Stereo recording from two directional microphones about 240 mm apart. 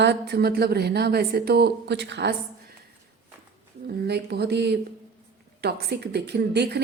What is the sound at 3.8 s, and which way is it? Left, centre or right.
A woman's voice, right.